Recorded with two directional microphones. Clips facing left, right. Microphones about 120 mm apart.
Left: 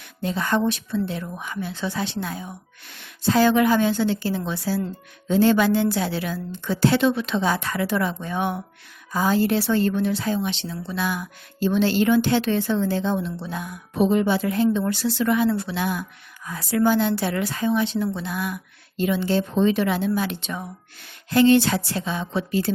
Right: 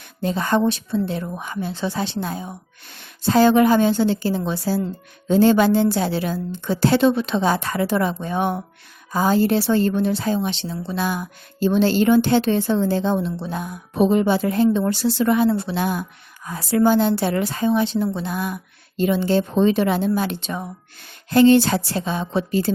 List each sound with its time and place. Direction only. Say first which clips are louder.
0.2 s a woman's voice: right 3 dB; 35° right (ahead or behind)